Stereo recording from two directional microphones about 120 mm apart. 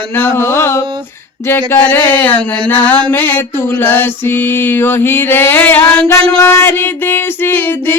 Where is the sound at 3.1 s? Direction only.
15° left (ahead or behind).